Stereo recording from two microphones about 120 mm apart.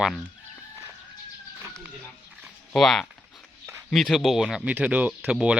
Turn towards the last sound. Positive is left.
turn(degrees=-10)  # may be behind; listen again after turning